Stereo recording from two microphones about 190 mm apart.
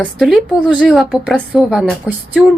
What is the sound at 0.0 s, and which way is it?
A woman's voice, centre (ahead or behind).